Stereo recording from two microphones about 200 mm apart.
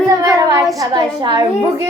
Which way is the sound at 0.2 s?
15° right (ahead or behind).